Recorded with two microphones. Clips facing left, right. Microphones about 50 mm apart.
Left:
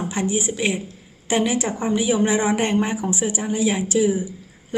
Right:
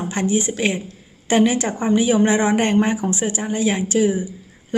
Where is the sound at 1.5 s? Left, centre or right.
Centre.